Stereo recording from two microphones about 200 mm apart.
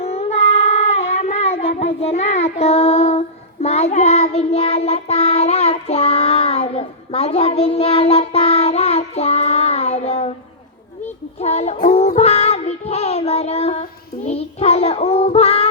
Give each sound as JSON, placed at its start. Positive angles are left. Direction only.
{"t": 0.0, "sound": "child singing", "side_deg": 30}
{"t": 11.3, "sound": "child singing", "side_deg": 30}